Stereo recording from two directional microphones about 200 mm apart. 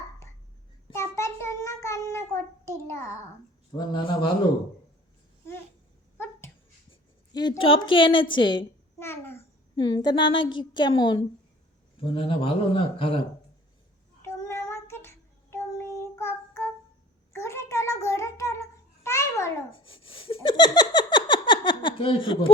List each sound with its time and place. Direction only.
0.9 s a child's voice: 15° left (ahead or behind)
3.8 s a woman's voice: 25° left (ahead or behind)
7.3 s a woman's voice: 20° left (ahead or behind)
9.0 s a child's voice: 10° left (ahead or behind)
9.7 s a woman's voice: 20° left (ahead or behind)
14.2 s child singing: 15° left (ahead or behind)
17.3 s a sound: 15° left (ahead or behind)
19.8 s a sound: 25° left (ahead or behind)